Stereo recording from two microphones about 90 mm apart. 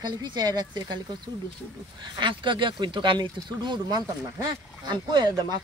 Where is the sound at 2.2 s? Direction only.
60° right (ahead or behind).